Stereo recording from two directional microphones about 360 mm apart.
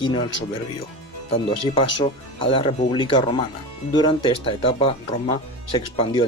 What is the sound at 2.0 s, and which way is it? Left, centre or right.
Speech, centre.